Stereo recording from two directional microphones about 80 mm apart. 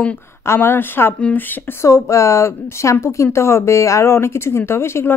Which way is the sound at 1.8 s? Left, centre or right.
Left.